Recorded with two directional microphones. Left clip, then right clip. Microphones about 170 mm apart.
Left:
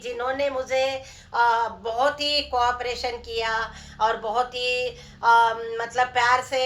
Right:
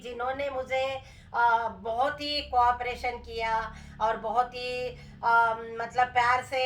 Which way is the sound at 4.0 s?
35° left (ahead or behind).